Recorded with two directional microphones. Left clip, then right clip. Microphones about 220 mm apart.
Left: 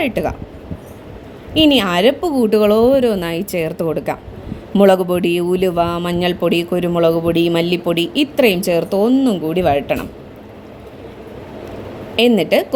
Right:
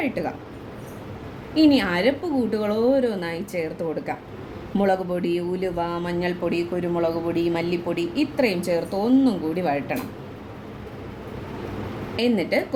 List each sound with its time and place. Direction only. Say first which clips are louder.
0.0 s speech: left 8 dB; 40° left (ahead or behind)
1.6 s speech: left 7 dB; 35° left (ahead or behind)
12.4 s speech: left 8 dB; 35° left (ahead or behind)